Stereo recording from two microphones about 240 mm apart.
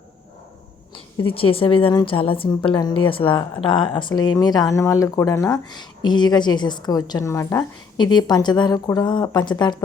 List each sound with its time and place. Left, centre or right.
1.3 s a woman's voice: left